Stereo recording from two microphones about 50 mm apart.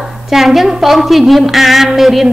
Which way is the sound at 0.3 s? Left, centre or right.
Centre.